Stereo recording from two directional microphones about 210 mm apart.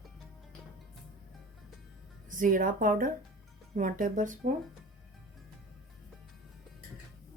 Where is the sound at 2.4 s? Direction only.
40° right (ahead or behind).